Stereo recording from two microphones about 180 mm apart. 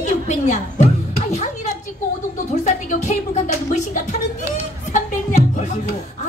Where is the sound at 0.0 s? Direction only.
40° left (ahead or behind).